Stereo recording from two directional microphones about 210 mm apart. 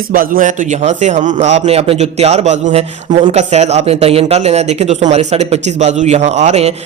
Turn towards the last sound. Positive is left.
turn(degrees=-30)  # may be behind; listen again after turning